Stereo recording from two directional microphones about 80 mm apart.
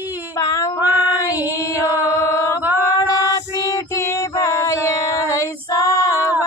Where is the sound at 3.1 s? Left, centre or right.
Left.